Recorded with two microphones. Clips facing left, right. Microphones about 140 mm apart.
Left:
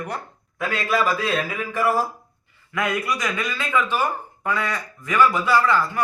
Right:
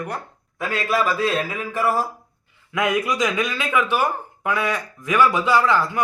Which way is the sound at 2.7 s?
15° right (ahead or behind).